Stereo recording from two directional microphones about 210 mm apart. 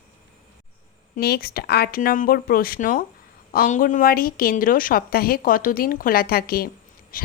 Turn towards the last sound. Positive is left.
turn(degrees=45)  # may be behind; listen again after turning